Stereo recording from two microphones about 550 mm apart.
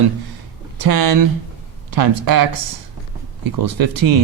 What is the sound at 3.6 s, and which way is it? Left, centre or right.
Speech, right.